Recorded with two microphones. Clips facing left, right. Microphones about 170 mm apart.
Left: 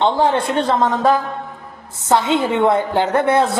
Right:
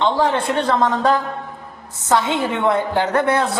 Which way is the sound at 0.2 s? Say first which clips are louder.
Left 2 dB; 25° left (ahead or behind).